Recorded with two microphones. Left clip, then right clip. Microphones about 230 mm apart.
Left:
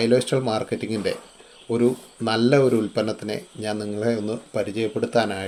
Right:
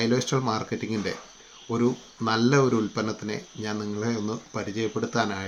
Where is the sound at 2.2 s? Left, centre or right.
Centre.